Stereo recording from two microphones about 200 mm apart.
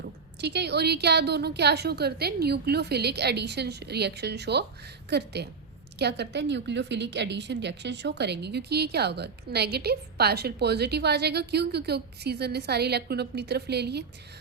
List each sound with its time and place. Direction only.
0.0 s a woman's voice: 55° right (ahead or behind)